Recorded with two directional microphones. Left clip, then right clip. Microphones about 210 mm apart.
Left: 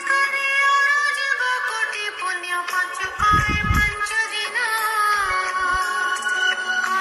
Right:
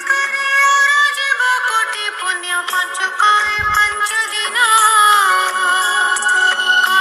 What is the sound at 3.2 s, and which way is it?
Music, 35° right (ahead or behind).